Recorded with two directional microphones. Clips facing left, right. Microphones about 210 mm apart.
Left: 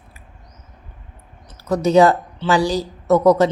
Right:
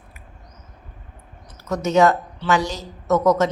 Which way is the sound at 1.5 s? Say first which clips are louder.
Left 5 dB; 35° left (ahead or behind).